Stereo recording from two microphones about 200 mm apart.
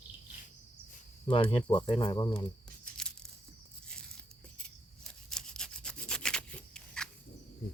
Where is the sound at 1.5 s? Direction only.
25° left (ahead or behind).